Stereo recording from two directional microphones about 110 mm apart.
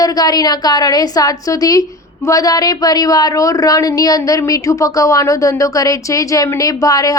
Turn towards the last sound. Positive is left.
turn(degrees=35)  # may be behind; listen again after turning